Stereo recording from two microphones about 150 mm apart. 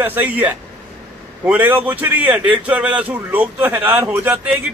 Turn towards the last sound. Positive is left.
turn(degrees=-10)  # may be behind; listen again after turning